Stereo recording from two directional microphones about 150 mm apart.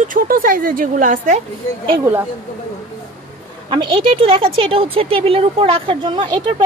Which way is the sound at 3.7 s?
30° right (ahead or behind).